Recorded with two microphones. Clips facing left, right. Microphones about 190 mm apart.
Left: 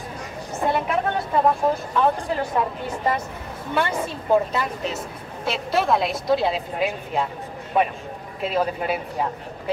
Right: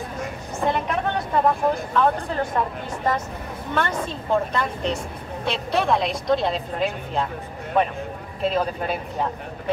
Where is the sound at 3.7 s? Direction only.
10° left (ahead or behind).